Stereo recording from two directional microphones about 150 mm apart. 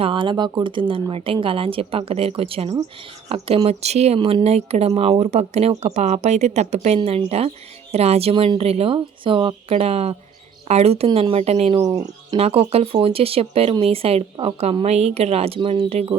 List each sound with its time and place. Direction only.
0.0 s speech: 35° right (ahead or behind)
11.8 s speech: 25° right (ahead or behind)
12.4 s speech: 40° right (ahead or behind)